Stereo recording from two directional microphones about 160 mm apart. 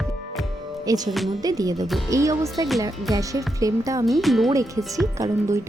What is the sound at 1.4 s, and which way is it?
Speech, 25° right (ahead or behind).